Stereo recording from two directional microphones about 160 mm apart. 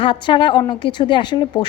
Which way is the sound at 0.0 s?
30° left (ahead or behind).